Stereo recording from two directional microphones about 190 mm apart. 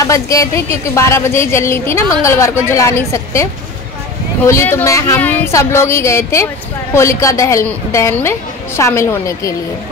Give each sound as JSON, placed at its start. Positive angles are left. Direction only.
{"t": 0.0, "sound": "speech", "side_deg": 15}